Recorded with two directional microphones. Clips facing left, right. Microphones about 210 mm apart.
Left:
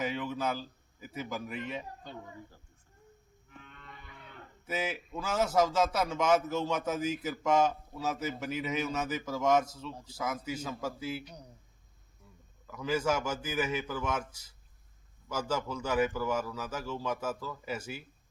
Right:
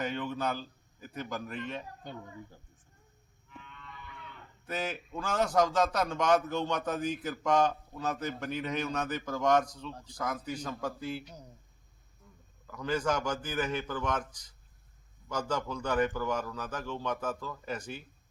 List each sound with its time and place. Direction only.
0.0 s a man's voice: 5° left (ahead or behind)
3.6 s cattle: 45° left (ahead or behind)
4.6 s a man's voice: 5° left (ahead or behind)
12.6 s a man's voice: 5° left (ahead or behind)